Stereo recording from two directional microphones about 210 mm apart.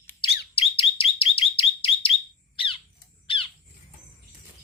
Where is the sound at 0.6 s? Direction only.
25° left (ahead or behind).